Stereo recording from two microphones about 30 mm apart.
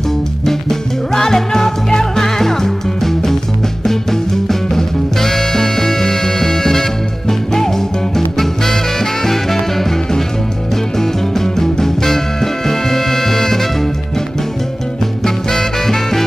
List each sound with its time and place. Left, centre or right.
0.5 s music: centre
15.2 s music: centre